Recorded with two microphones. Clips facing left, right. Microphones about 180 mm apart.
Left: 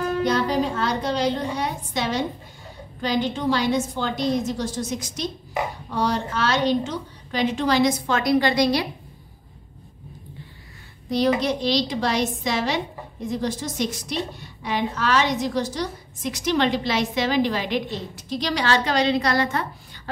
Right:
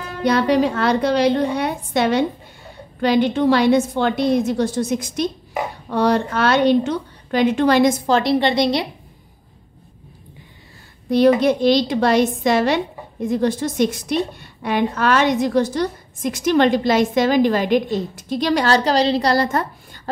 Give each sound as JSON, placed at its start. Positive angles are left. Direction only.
{"t": 0.2, "sound": "a woman's voice", "side_deg": -70}
{"t": 8.1, "sound": "a woman's voice", "side_deg": -25}
{"t": 11.1, "sound": "a woman's voice", "side_deg": -55}